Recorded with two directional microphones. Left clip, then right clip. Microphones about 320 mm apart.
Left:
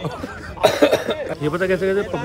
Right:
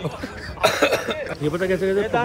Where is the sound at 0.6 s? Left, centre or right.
Left.